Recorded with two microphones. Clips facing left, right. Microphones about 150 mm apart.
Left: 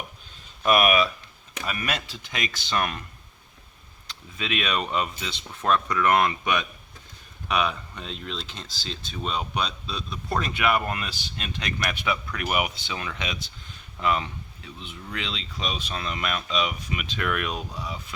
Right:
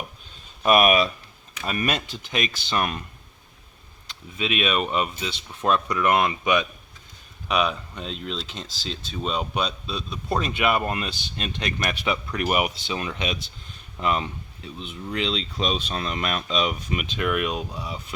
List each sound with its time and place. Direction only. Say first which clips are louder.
0.6 s speech: right 2 dB; 25° right (ahead or behind)
4.4 s speech: right 3 dB; 20° right (ahead or behind)
7.9 s speech: right 3 dB; 25° right (ahead or behind)
17.2 s speech: right 3 dB; 20° right (ahead or behind)